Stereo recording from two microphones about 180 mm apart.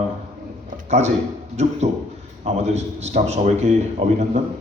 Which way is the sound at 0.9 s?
40° right (ahead or behind).